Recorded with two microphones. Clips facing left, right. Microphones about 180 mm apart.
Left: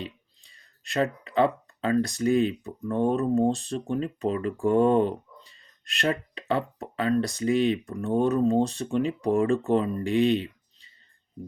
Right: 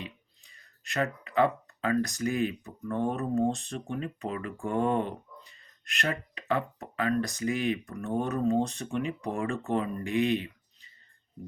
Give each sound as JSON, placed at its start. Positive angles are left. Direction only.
{"t": 0.0, "sound": "speech", "side_deg": 30}